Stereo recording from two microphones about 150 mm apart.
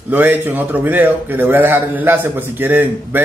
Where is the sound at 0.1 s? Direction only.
10° right (ahead or behind).